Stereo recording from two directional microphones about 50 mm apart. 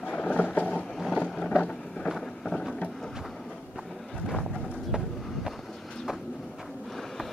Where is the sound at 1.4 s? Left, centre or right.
Left.